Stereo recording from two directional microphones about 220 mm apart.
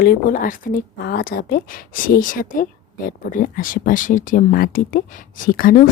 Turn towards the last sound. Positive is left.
turn(degrees=40)  # may be behind; listen again after turning